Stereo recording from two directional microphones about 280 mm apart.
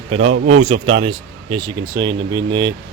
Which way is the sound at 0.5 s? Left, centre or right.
Right.